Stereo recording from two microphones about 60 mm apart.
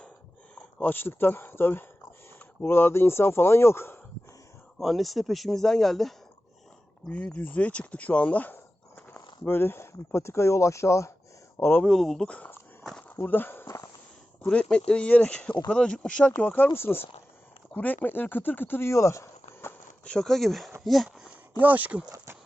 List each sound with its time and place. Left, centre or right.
0.5 s speech: left
4.8 s speech: centre
7.1 s speech: centre
9.1 s speech: left
11.5 s speech: left
11.9 s speech: centre
12.2 s speech: left
13.2 s speech: left
13.7 s a sound: left
14.4 s speech: centre
16.4 s speech: left
16.6 s speech: left
20.1 s speech: centre
21.6 s speech: right